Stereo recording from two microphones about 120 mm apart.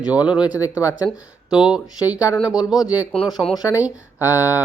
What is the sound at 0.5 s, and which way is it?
Speech, 30° left (ahead or behind).